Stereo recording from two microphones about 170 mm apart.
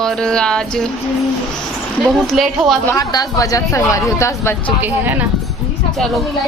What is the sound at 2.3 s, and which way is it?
Music, centre (ahead or behind).